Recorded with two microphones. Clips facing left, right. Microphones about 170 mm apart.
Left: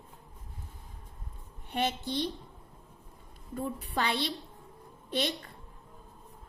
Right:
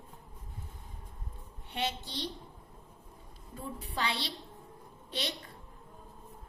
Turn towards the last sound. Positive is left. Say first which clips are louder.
# left 6 dB
turn(degrees=50)  # may be behind; listen again after turning